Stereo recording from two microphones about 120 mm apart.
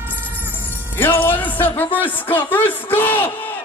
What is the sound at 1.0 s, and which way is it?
A man's voice, 15° left (ahead or behind).